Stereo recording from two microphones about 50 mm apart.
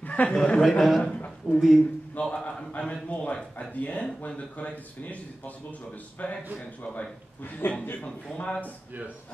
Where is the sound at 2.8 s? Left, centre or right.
Left.